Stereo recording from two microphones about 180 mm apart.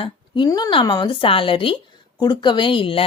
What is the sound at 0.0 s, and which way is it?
Speech, 25° left (ahead or behind).